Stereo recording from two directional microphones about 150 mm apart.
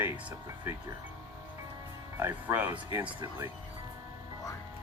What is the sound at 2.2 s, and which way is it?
Speech, 15° right (ahead or behind).